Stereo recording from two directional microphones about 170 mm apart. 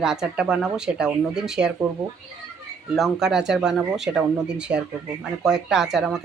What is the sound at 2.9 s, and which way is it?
Speech, centre (ahead or behind).